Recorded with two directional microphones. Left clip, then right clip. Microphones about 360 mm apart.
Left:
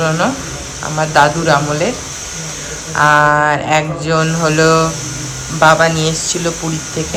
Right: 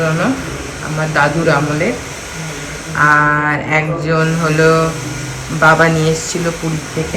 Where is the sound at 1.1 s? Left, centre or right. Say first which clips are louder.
Left 2 dB; centre.